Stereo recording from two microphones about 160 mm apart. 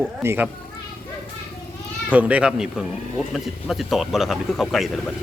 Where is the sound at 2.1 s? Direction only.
10° right (ahead or behind).